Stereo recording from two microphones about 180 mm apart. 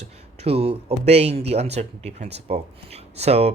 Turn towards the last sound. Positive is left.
turn(degrees=-35)  # may be behind; listen again after turning